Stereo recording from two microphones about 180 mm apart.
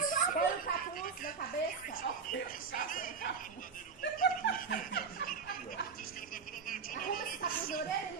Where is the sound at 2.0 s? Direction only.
50° left (ahead or behind).